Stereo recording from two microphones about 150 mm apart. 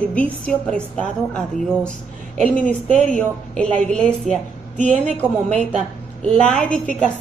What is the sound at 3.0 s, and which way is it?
A woman's voice, 5° left (ahead or behind).